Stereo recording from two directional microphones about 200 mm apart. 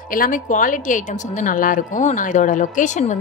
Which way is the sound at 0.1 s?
45° left (ahead or behind).